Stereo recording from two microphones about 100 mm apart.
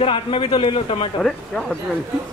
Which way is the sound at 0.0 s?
60° left (ahead or behind).